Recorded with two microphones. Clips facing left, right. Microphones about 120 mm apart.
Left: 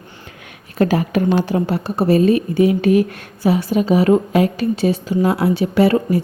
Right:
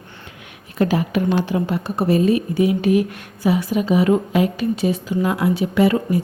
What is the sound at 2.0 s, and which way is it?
Speech, 60° left (ahead or behind).